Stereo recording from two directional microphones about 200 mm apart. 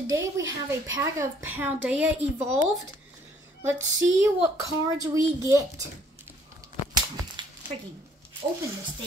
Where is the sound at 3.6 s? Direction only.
15° right (ahead or behind).